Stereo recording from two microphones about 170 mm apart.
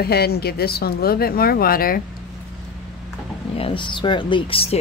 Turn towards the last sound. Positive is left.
turn(degrees=35)  # may be behind; listen again after turning